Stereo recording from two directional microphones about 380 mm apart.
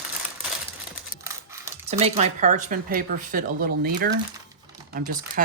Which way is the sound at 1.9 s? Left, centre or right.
Centre.